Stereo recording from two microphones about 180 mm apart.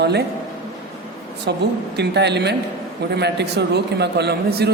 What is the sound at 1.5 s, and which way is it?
Speech, 65° right (ahead or behind).